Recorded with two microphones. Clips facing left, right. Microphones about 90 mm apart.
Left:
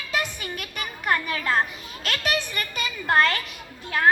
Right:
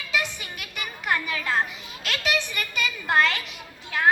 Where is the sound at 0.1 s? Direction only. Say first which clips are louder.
Left 1 dB; 45° left (ahead or behind).